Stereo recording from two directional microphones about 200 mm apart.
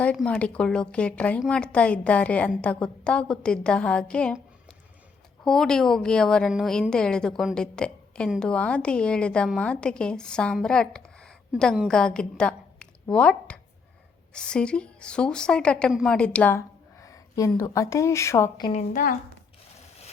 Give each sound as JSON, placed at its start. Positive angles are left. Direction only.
{"t": 0.0, "sound": "a woman's voice", "side_deg": 5}
{"t": 5.5, "sound": "a woman's voice", "side_deg": 5}
{"t": 18.7, "sound": "a woman's voice", "side_deg": 35}